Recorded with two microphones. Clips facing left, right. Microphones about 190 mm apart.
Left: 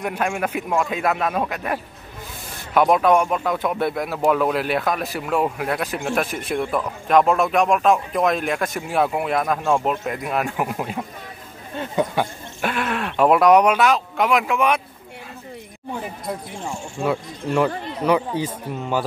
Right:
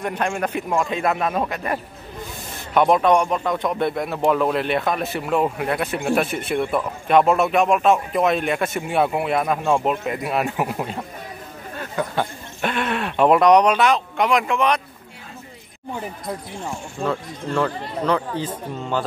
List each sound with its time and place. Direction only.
0.0 s speech: 5° left (ahead or behind)
11.7 s speech: 20° left (ahead or behind)
12.6 s speech: 5° left (ahead or behind)
17.0 s speech: 10° left (ahead or behind)